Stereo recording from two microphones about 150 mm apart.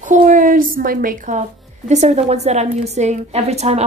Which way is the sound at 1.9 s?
50° right (ahead or behind).